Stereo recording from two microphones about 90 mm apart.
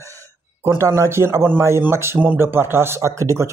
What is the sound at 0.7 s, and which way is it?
Speech, 30° right (ahead or behind).